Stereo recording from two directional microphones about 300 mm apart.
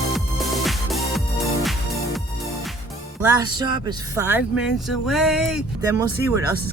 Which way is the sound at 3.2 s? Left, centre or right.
Centre.